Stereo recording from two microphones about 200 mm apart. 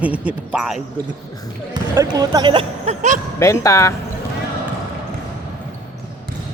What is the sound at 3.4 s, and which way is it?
Speech, 15° left (ahead or behind).